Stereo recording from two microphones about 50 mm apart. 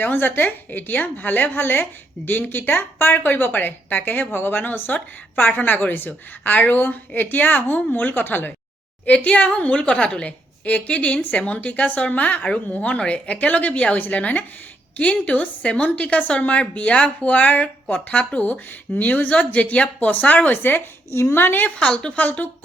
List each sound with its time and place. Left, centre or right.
0.0 s a woman's voice: left
3.5 s a woman's voice: left
9.0 s a woman's voice: left
21.8 s a woman's voice: left